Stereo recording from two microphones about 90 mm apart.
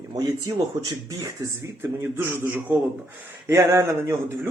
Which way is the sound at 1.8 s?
25° right (ahead or behind).